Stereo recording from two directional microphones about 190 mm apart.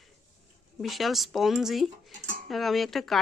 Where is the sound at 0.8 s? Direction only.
Centre (ahead or behind).